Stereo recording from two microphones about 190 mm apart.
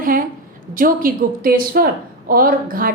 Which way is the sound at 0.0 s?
45° right (ahead or behind).